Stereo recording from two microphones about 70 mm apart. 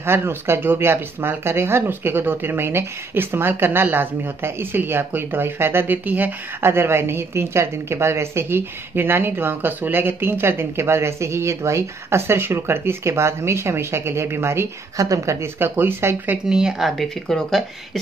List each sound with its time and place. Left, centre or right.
0.0 s speech: right
15.0 s a woman's voice: right
15.4 s speech: right
16.4 s speech: centre